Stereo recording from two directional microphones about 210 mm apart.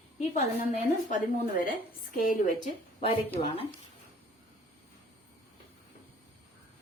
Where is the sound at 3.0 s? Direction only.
25° left (ahead or behind).